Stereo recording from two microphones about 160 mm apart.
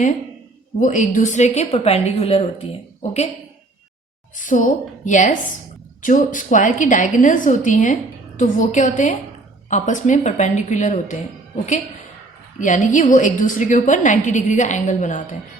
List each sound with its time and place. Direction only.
0.8 s a woman's voice: 50° left (ahead or behind)
4.4 s a woman's voice: 50° left (ahead or behind)
12.5 s a woman's voice: 50° left (ahead or behind)